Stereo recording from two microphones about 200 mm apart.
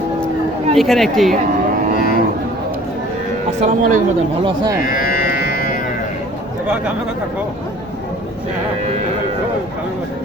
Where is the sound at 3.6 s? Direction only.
40° right (ahead or behind).